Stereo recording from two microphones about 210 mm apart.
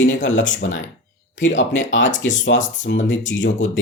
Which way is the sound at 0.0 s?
60° left (ahead or behind).